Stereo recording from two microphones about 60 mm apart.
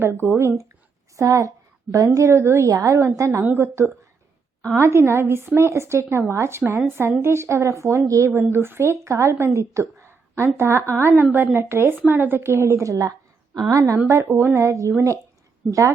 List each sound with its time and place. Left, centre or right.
0.0 s a woman's voice: right
1.1 s a sound: right
2.1 s a woman's voice: right
2.6 s a woman's voice: right
3.0 s a woman's voice: right
8.3 s a woman's voice: right
12.8 s a woman's voice: right
14.1 s a woman's voice: right
14.7 s a woman's voice: right